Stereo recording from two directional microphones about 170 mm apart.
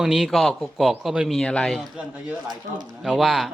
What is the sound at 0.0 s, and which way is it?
Speech, centre (ahead or behind).